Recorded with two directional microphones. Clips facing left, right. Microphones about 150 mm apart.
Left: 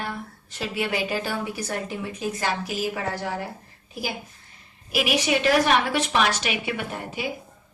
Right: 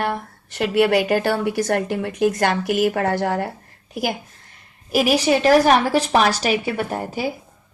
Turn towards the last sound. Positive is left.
turn(degrees=-40)  # may be behind; listen again after turning